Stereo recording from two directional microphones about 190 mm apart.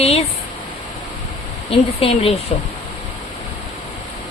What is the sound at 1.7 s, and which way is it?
Speech, 30° left (ahead or behind).